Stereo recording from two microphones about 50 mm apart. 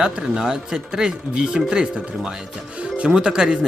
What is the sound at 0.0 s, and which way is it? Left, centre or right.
Speech, centre.